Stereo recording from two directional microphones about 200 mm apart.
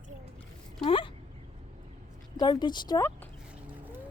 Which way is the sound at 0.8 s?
25° left (ahead or behind).